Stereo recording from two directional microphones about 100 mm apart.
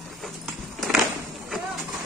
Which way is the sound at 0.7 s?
Centre (ahead or behind).